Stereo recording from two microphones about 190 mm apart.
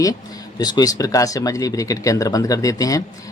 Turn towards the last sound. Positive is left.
turn(degrees=15)  # may be behind; listen again after turning